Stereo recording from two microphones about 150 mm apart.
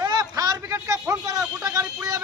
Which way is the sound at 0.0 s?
25° right (ahead or behind).